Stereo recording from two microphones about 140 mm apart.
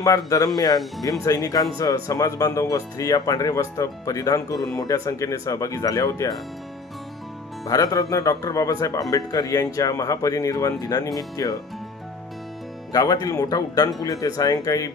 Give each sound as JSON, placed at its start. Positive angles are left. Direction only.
{"t": 0.0, "sound": "speech", "side_deg": 25}
{"t": 7.6, "sound": "speech", "side_deg": 25}
{"t": 12.9, "sound": "speech", "side_deg": 25}